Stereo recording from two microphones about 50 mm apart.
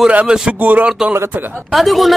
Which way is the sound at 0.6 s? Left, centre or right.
Right.